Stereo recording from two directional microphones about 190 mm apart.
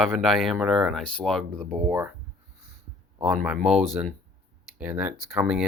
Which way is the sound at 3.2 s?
5° right (ahead or behind).